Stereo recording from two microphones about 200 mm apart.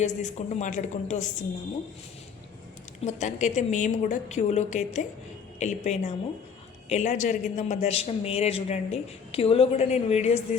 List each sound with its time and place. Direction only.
0.0 s a man's voice: 35° left (ahead or behind)
3.0 s a man's voice: 35° left (ahead or behind)